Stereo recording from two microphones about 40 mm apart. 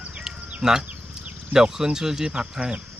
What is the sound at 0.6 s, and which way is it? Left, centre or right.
Speech, centre.